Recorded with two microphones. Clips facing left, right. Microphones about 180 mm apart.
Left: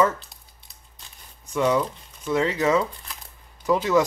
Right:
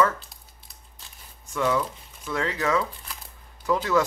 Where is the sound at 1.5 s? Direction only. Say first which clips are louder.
Left 3 dB; 20° left (ahead or behind).